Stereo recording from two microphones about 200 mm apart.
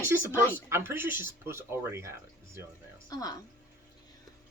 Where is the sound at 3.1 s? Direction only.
20° left (ahead or behind).